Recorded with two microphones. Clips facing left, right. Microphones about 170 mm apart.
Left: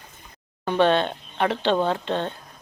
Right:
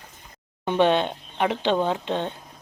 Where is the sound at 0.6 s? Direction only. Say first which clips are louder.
Even; 15° right (ahead or behind).